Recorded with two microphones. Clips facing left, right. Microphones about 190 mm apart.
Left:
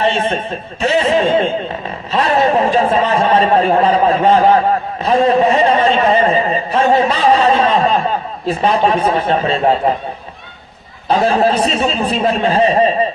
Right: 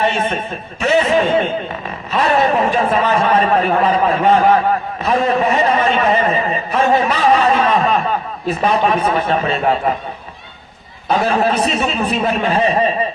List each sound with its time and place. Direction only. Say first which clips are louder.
0.0 s a man's voice: left 2 dB; 30° left (ahead or behind)
11.1 s a man's voice: left 3 dB; 30° left (ahead or behind)